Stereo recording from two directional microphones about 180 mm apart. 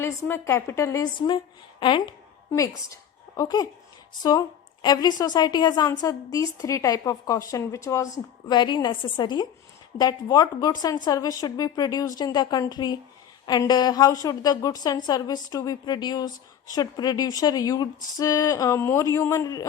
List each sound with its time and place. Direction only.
0.3 s a woman's voice: 15° left (ahead or behind)
2.5 s a woman's voice: 15° left (ahead or behind)